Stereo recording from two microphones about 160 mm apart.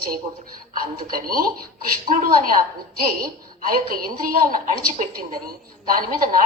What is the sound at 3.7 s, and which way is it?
A woman's voice, 65° right (ahead or behind).